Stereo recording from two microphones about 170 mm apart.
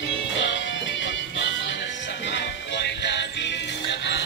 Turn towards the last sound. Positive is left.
turn(degrees=90)